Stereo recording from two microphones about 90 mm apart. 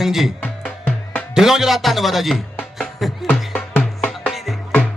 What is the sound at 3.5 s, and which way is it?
Music, 15° left (ahead or behind).